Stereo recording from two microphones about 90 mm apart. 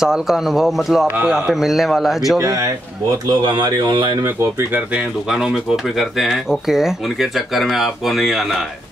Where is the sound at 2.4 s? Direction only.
35° right (ahead or behind).